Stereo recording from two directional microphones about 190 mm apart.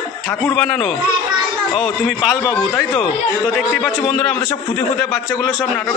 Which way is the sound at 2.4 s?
15° left (ahead or behind).